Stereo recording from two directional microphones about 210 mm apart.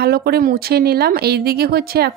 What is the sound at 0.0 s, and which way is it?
Speech, 50° right (ahead or behind).